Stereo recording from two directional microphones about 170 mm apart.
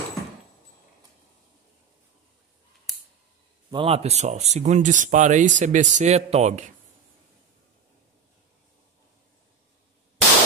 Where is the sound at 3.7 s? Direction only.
35° right (ahead or behind).